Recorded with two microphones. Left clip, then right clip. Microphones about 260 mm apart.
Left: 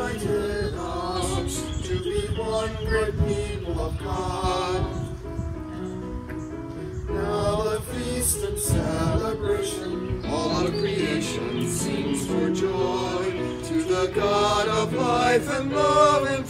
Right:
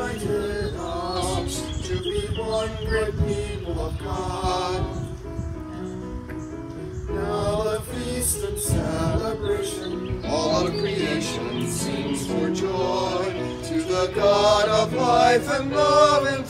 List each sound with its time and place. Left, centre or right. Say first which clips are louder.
0.0 s chant: even; centre
1.9 s music: even; centre
4.1 s mantra: right 1 dB; centre
7.2 s male singing: even; centre
8.6 s music: even; centre